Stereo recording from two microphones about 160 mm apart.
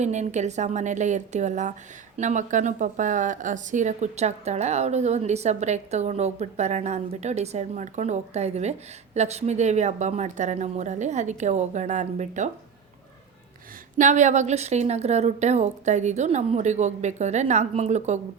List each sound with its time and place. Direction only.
0.0 s speech: 45° right (ahead or behind)
14.0 s speech: 50° right (ahead or behind)